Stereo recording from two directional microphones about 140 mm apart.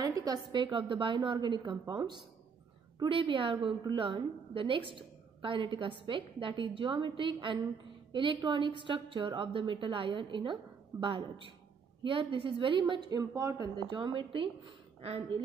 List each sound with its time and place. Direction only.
0.0 s a woman's voice: 25° right (ahead or behind)